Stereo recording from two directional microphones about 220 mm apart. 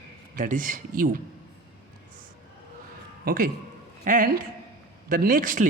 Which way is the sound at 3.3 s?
40° right (ahead or behind).